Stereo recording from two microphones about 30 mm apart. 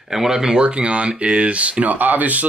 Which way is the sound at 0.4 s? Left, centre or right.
Right.